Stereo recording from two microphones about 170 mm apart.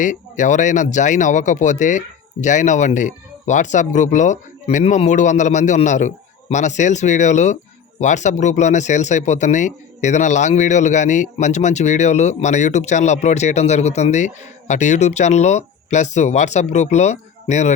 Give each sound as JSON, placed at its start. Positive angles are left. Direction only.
{"t": 0.0, "sound": "speech", "side_deg": 50}